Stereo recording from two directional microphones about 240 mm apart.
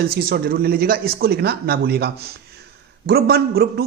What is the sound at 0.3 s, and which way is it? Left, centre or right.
Speech, right.